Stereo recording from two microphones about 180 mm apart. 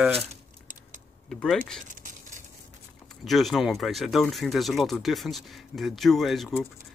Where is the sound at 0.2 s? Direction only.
35° right (ahead or behind).